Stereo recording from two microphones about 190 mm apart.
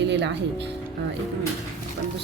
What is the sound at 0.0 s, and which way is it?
Music, 65° right (ahead or behind).